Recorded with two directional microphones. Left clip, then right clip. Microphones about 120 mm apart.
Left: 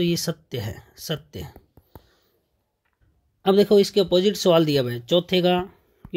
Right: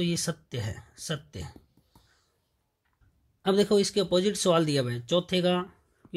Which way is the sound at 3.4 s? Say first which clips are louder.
Left 7 dB; 20° left (ahead or behind).